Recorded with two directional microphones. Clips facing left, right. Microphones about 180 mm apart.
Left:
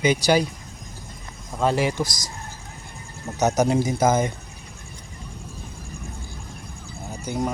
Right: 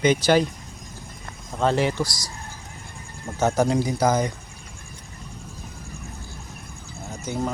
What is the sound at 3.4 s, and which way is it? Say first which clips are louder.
Speech: left 1 dB; 20° left (ahead or behind).